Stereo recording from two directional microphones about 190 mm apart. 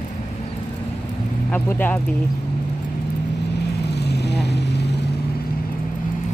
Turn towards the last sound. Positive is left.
turn(degrees=60)  # may be behind; listen again after turning